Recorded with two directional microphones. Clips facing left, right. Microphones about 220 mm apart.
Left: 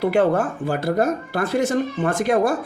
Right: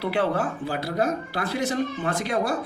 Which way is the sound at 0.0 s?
45° left (ahead or behind).